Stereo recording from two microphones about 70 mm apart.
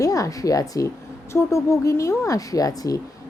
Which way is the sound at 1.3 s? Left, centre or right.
Left.